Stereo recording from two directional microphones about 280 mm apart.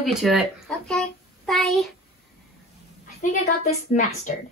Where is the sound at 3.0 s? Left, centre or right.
Left.